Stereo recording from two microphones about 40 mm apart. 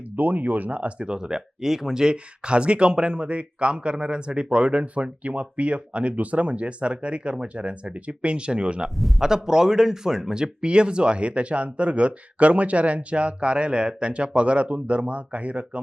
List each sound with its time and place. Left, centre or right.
0.2 s speech: right; by 2.1 s centre
2.1 s speech: right
9.0 s a man's voice: centre
9.2 s speech: centre; by 15.8 s right